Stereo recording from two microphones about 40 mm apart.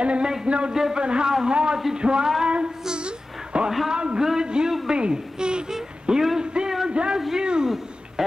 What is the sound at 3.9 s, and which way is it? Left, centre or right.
A woman's voice, right.